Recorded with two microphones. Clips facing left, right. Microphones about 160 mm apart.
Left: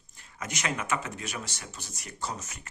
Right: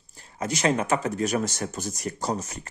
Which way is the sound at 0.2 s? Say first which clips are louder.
Right 10 dB; 35° right (ahead or behind).